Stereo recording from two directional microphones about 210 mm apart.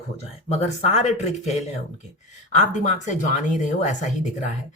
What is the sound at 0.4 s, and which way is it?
Speech, 30° left (ahead or behind).